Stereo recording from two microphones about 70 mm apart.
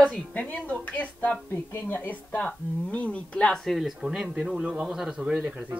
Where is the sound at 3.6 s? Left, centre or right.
Centre.